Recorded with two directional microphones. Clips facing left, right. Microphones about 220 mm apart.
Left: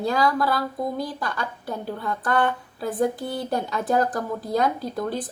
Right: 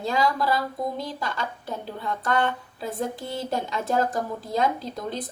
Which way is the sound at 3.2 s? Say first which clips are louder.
Left 3 dB; 25° right (ahead or behind).